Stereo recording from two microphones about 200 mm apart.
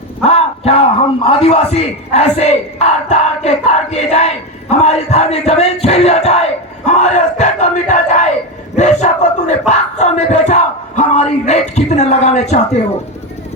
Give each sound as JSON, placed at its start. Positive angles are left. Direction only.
{"t": 0.2, "sound": "a man's voice", "side_deg": 30}